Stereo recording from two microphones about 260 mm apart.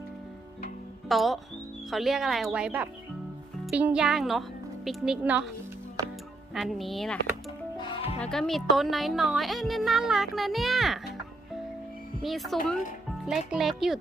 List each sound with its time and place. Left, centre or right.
1.0 s speech: centre
6.0 s music: centre
6.5 s speech: centre
7.8 s music: left
8.2 s speech: centre
12.2 s speech: centre